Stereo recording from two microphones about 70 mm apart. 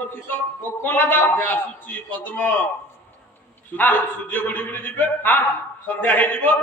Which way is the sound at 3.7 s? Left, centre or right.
Left.